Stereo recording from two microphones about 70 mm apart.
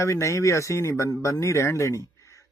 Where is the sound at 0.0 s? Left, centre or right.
Left.